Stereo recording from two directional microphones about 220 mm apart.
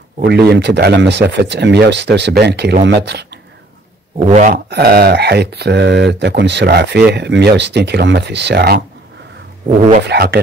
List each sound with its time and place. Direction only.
0.2 s speech: 50° right (ahead or behind)
4.3 s speech: 35° right (ahead or behind)
9.7 s speech: 35° right (ahead or behind)
10.0 s speech: 45° right (ahead or behind)